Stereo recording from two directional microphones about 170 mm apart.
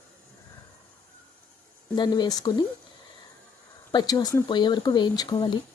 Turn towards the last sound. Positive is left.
turn(degrees=25)  # may be behind; listen again after turning